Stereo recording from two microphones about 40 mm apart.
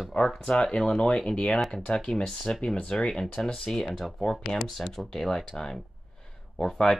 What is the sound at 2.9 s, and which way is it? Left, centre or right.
Speech, centre.